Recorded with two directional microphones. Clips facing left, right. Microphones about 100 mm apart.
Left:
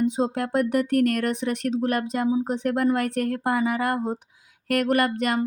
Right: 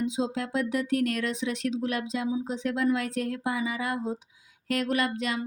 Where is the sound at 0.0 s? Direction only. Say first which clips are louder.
Left 5 dB; 55° left (ahead or behind).